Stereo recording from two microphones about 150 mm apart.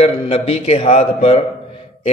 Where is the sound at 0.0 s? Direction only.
40° left (ahead or behind).